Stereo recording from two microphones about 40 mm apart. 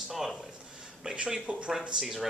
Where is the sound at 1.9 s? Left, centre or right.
Centre.